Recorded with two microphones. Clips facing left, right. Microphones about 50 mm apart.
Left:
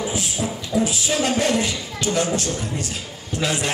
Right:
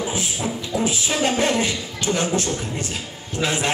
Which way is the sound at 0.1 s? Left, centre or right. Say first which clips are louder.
Even; right.